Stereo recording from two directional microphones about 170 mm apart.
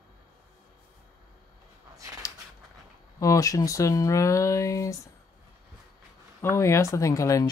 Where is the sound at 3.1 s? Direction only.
20° left (ahead or behind).